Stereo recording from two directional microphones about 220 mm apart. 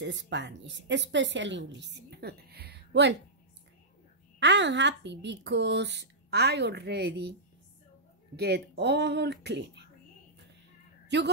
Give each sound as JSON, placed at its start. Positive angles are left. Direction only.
{"t": 0.0, "sound": "a woman's voice", "side_deg": -55}
{"t": 4.4, "sound": "a woman's voice", "side_deg": -55}
{"t": 8.4, "sound": "a woman's voice", "side_deg": -50}
{"t": 11.1, "sound": "a woman's voice", "side_deg": -50}